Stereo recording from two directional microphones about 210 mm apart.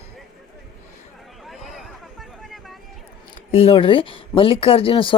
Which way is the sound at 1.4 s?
Centre (ahead or behind).